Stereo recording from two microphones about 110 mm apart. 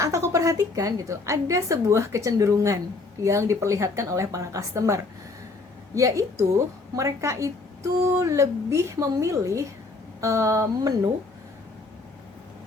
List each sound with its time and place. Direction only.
0.0 s a woman's voice: 25° right (ahead or behind)